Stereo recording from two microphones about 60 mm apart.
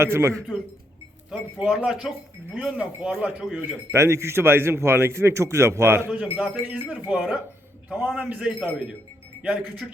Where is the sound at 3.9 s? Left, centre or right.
Right.